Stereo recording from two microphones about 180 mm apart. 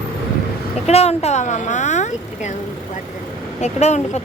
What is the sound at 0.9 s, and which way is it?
Speech, 35° left (ahead or behind).